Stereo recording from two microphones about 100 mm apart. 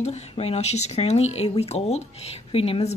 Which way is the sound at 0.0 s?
90° left.